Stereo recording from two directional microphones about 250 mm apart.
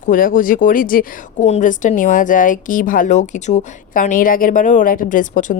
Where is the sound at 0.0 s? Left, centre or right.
Left.